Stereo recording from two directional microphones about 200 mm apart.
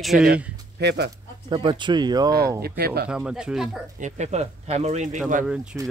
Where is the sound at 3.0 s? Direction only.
5° right (ahead or behind).